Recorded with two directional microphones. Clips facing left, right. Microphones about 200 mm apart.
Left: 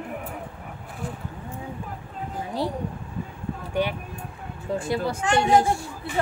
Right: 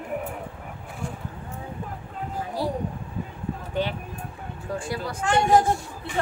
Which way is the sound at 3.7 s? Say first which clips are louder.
Left 2 dB; 15° left (ahead or behind).